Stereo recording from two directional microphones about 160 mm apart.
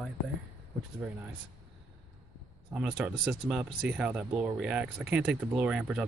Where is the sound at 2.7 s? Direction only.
5° right (ahead or behind).